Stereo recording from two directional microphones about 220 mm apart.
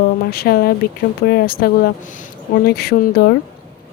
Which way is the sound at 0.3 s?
45° left (ahead or behind).